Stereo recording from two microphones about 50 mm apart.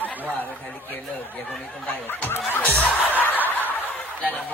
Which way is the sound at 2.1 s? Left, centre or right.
Left.